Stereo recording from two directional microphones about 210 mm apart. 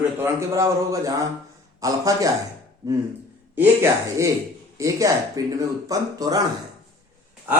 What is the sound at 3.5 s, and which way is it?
A man's voice, 15° right (ahead or behind).